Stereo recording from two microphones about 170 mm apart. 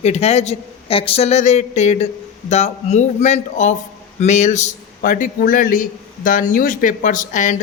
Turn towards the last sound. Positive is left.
turn(degrees=50)  # may be behind; listen again after turning